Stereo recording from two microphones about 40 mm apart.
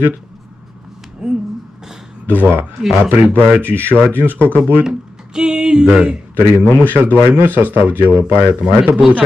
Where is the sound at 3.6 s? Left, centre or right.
Right.